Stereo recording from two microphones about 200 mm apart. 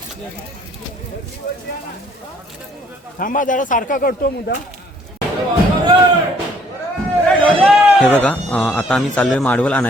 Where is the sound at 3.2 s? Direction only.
40° left (ahead or behind).